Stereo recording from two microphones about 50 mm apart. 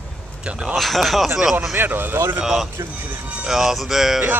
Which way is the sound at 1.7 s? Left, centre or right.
Right.